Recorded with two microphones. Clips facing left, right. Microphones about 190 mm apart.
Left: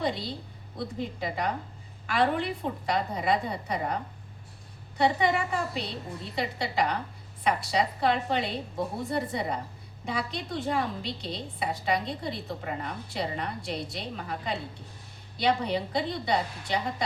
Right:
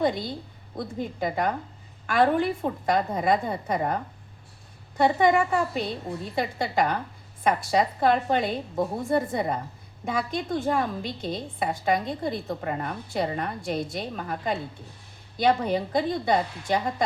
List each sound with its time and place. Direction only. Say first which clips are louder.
0.0 s a woman's voice: right 5 dB; 50° right (ahead or behind)